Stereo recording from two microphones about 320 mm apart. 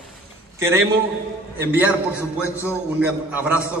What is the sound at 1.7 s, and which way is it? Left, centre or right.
A man's voice, centre.